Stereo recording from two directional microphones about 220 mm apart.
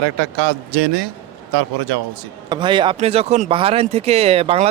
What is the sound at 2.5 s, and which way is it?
Speech, 20° right (ahead or behind).